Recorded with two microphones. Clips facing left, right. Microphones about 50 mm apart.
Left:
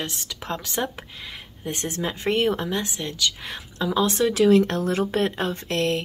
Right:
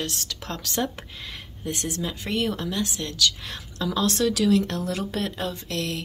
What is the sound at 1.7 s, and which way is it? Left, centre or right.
A woman's voice, left.